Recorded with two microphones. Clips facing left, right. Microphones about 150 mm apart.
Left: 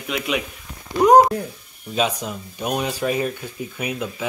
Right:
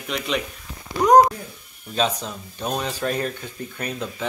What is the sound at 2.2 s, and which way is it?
Speech, 10° left (ahead or behind).